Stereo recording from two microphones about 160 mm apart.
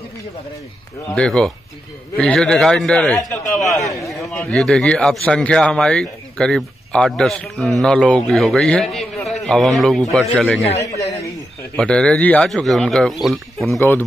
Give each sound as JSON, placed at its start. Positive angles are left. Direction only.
{"t": 1.0, "sound": "a man's voice", "side_deg": 5}
{"t": 11.7, "sound": "a man's voice", "side_deg": 5}
{"t": 13.7, "sound": "speech", "side_deg": 10}